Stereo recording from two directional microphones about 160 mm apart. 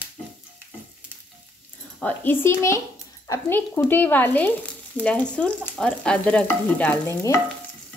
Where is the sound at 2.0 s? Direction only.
10° left (ahead or behind).